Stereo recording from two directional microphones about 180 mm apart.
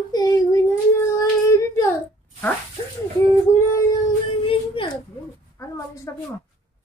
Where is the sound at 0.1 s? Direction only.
20° left (ahead or behind).